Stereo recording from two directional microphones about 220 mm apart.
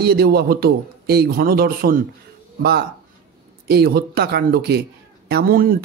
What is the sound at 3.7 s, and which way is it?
Speech, 45° right (ahead or behind).